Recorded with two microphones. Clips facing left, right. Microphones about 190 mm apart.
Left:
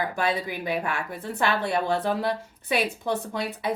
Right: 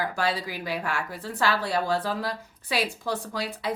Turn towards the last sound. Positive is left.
turn(degrees=25)  # may be behind; listen again after turning